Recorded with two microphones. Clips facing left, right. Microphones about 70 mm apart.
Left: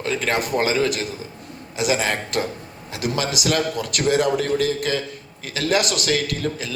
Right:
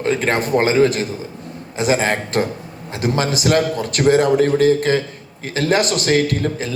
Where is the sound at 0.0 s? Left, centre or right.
Right.